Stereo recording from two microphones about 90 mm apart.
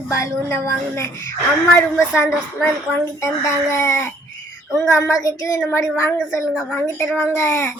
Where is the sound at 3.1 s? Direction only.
35° left (ahead or behind).